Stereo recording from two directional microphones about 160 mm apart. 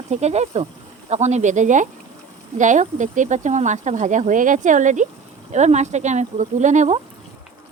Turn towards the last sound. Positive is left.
turn(degrees=-50)  # may be behind; listen again after turning